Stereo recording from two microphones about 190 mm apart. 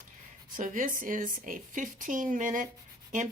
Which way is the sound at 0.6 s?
45° right (ahead or behind).